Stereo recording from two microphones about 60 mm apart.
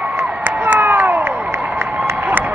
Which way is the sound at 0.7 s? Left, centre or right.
Right.